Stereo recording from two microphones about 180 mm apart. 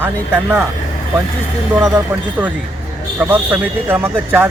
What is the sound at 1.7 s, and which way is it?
Speech, centre (ahead or behind).